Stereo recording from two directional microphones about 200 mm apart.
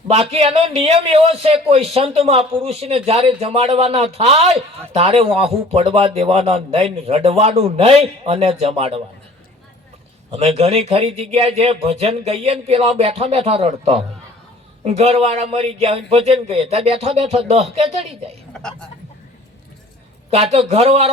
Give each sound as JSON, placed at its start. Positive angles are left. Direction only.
{"t": 0.1, "sound": "a man's voice", "side_deg": -30}
{"t": 10.3, "sound": "a man's voice", "side_deg": -30}
{"t": 18.5, "sound": "a sound", "side_deg": 5}
{"t": 20.3, "sound": "a man's voice", "side_deg": -30}